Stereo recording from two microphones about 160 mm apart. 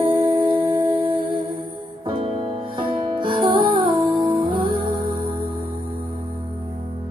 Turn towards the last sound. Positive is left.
turn(degrees=-30)  # may be behind; listen again after turning